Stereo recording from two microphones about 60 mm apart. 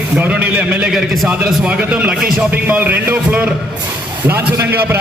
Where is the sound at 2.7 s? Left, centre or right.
Right.